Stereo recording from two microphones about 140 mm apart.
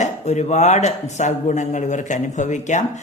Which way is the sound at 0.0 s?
55° left (ahead or behind).